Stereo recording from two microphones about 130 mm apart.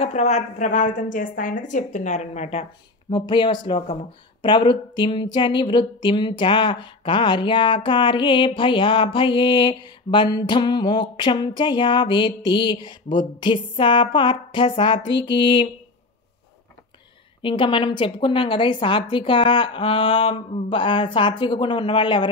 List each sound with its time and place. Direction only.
0.0 s a woman's voice: 55° left (ahead or behind)
3.1 s speech: 35° left (ahead or behind)
17.4 s speech: 40° left (ahead or behind)